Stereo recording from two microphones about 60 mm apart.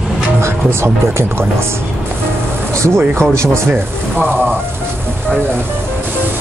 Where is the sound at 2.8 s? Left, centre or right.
Right.